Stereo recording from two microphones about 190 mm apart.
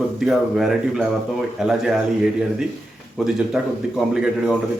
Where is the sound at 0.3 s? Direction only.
Centre (ahead or behind).